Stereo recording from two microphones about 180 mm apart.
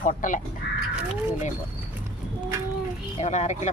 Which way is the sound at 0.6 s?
70° left (ahead or behind).